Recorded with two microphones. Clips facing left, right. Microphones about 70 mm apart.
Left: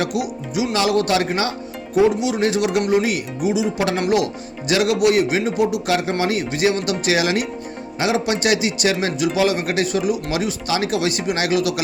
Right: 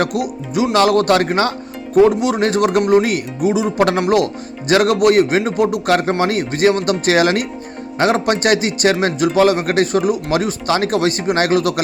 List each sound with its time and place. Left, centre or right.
0.0 s speech: right